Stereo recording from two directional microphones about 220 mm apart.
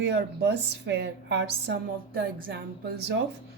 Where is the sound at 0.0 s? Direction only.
50° right (ahead or behind).